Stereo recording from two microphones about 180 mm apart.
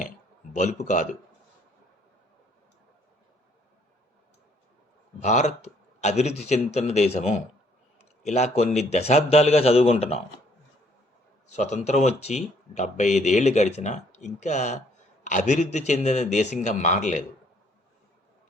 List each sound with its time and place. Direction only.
0.5 s speech: 40° left (ahead or behind)
5.2 s speech: 40° left (ahead or behind)
11.5 s speech: 40° left (ahead or behind)